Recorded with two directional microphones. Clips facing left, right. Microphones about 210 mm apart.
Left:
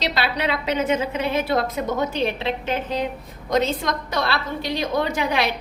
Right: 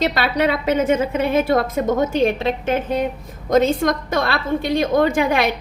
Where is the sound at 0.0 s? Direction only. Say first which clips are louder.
Right 5 dB; 50° right (ahead or behind).